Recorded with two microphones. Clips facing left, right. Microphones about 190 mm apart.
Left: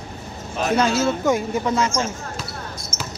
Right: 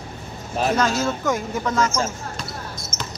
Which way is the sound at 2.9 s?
10° left (ahead or behind).